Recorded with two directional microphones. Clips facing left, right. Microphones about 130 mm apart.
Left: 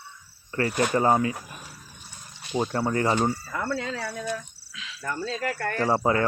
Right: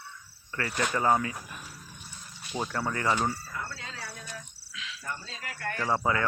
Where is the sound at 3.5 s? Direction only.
85° left.